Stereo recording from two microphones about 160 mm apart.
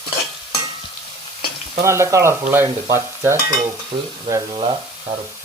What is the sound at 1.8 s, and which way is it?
Speech, 15° right (ahead or behind).